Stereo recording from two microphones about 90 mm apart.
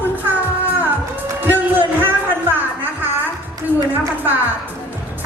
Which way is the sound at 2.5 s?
20° right (ahead or behind).